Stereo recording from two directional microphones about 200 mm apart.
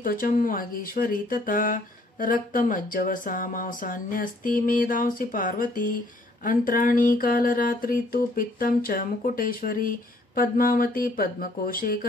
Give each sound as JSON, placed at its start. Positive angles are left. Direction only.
{"t": 0.0, "sound": "speech", "side_deg": 45}